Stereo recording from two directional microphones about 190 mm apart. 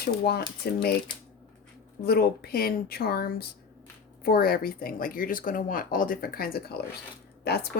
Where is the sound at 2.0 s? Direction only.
55° left (ahead or behind).